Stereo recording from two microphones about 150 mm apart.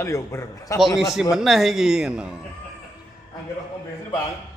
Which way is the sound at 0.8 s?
Centre (ahead or behind).